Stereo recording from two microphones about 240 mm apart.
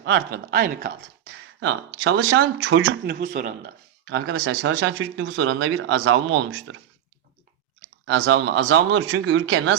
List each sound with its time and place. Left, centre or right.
0.0 s speech: right
1.5 s speech: right
3.2 s speech: right
4.0 s speech: right
8.0 s speech: right